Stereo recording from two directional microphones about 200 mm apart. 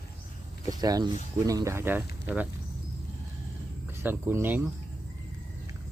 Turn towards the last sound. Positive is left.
turn(degrees=-10)  # may be behind; listen again after turning